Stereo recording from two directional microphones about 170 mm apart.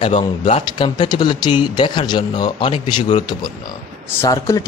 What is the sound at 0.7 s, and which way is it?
Speech, 25° left (ahead or behind).